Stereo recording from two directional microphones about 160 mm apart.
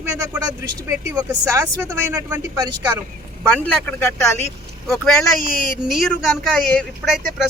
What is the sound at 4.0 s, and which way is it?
Speech, 15° left (ahead or behind).